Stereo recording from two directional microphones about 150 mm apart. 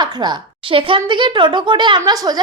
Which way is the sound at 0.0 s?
30° right (ahead or behind).